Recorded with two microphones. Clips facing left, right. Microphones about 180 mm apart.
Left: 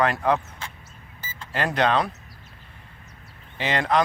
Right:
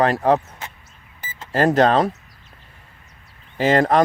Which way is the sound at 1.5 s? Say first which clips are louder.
Right 7 dB; 40° right (ahead or behind).